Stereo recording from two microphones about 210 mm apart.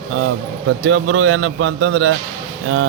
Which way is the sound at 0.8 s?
70° right (ahead or behind).